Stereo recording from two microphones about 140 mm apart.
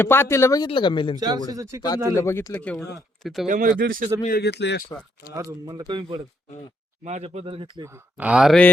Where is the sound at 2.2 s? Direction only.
20° left (ahead or behind).